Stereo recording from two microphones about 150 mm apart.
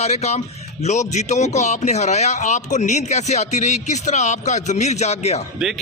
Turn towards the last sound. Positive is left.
turn(degrees=45)  # may be behind; listen again after turning